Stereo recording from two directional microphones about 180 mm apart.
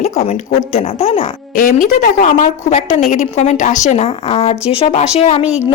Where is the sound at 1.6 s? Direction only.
45° left (ahead or behind).